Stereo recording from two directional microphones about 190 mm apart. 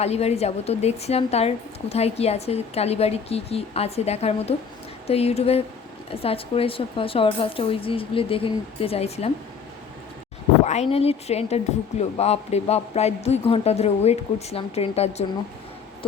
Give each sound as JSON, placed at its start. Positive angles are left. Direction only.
{"t": 0.0, "sound": "a woman's voice", "side_deg": 35}
{"t": 10.7, "sound": "a woman's voice", "side_deg": 35}